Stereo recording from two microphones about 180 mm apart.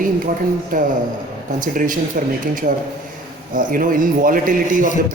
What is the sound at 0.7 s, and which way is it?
A man's voice, 50° right (ahead or behind).